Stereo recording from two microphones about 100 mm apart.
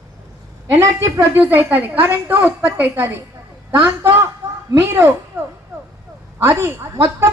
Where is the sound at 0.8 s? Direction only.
30° right (ahead or behind).